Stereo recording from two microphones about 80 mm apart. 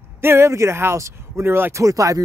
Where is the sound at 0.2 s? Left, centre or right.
Right.